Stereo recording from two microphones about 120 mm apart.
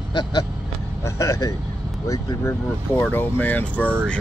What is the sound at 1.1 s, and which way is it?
Speech, 25° left (ahead or behind).